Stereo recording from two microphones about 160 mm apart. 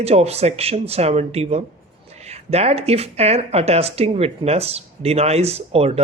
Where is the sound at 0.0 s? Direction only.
40° right (ahead or behind).